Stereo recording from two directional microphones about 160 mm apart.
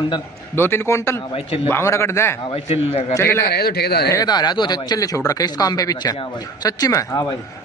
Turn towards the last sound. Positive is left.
turn(degrees=20)  # may be behind; listen again after turning